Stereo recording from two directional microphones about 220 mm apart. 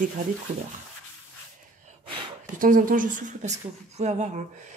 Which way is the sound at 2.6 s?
40° right (ahead or behind).